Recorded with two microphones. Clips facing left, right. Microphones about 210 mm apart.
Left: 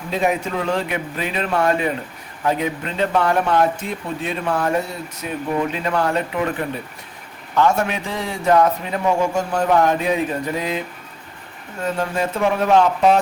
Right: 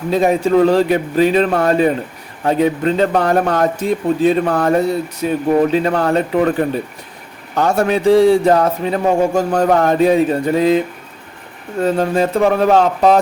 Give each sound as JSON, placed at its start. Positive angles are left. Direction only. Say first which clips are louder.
{"t": 0.1, "sound": "a man's voice", "louder": "right 8 dB", "side_deg": -35}